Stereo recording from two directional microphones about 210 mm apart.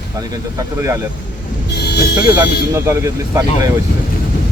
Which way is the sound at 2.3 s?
10° right (ahead or behind).